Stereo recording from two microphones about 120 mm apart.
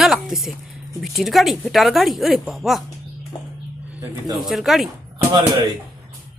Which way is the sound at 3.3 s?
40° left (ahead or behind).